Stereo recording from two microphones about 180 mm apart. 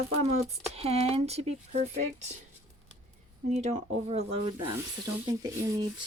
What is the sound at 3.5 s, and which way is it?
Speech, 40° right (ahead or behind).